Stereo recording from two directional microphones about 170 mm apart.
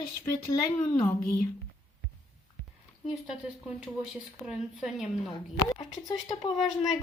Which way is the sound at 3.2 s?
5° right (ahead or behind).